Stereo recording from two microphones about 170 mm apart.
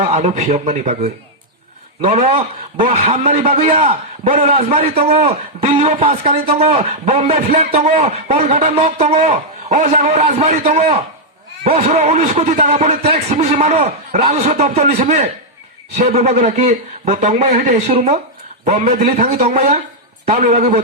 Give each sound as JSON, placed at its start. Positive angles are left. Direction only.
{"t": 0.0, "sound": "a man's voice", "side_deg": -40}
{"t": 2.0, "sound": "a man's voice", "side_deg": -35}